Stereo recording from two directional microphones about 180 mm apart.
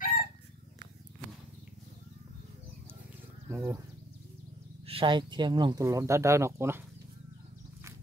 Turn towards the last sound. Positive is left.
turn(degrees=-15)  # may be behind; listen again after turning